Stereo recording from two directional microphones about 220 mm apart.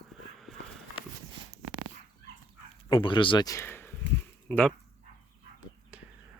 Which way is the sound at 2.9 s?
20° left (ahead or behind).